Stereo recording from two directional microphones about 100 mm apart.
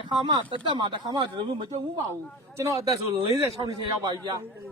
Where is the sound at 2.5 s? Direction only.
35° right (ahead or behind).